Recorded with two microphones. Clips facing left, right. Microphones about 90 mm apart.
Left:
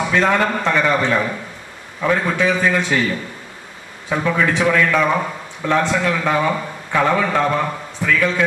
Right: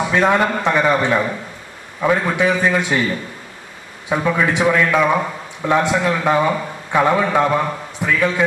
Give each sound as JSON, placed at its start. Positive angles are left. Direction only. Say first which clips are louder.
{"t": 0.0, "sound": "a man's voice", "louder": "right 1 dB", "side_deg": -15}